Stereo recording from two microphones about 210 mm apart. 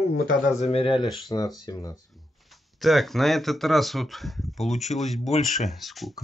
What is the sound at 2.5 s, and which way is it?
Speech, centre (ahead or behind).